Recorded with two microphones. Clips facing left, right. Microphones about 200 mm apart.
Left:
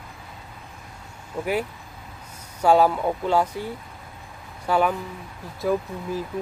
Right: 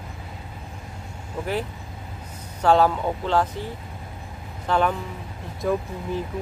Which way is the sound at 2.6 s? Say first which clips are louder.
Left 1 dB; 10° left (ahead or behind).